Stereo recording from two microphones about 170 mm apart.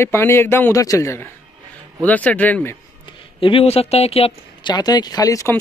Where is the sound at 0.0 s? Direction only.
15° left (ahead or behind).